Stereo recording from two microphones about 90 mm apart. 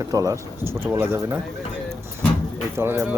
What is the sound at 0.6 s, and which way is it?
Speech, 25° right (ahead or behind).